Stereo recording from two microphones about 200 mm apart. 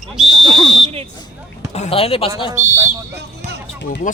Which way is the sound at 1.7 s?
30° left (ahead or behind).